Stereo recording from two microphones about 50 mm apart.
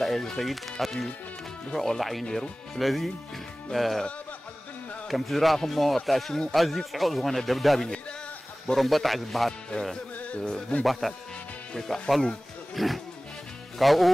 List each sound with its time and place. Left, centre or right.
0.0 s speech: centre
2.3 s speech: centre
2.8 s speech: centre
5.0 s speech: centre
10.1 s music: left
10.8 s speech: centre